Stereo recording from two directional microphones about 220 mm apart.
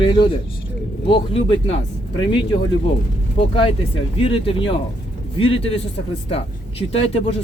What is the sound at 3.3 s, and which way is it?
Speech, 25° left (ahead or behind).